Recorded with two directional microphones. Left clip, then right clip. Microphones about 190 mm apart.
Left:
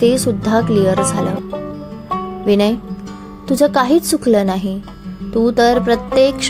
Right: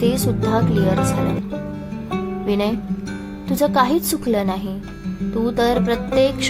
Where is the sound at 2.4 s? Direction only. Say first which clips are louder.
Left 8 dB; 25° left (ahead or behind).